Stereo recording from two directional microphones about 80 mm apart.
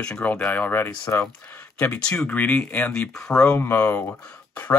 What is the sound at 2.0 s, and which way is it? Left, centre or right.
Speech, centre.